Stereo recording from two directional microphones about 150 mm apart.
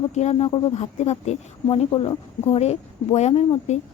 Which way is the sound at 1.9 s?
35° left (ahead or behind).